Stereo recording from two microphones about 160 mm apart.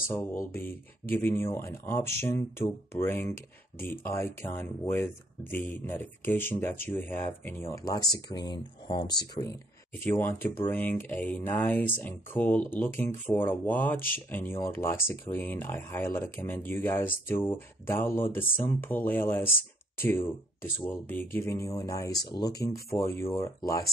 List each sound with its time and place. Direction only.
0.1 s speech: 15° left (ahead or behind); by 9.2 s 30° left (ahead or behind)
9.9 s speech: 15° left (ahead or behind)